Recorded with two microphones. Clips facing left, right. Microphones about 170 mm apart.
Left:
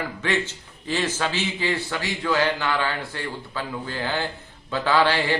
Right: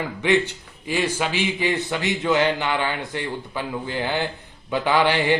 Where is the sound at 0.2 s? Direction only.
15° right (ahead or behind).